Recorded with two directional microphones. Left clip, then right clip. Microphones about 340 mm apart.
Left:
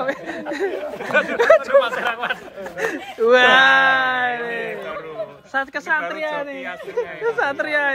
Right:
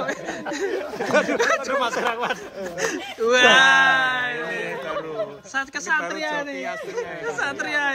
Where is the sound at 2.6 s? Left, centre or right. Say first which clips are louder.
Left 1 dB; centre.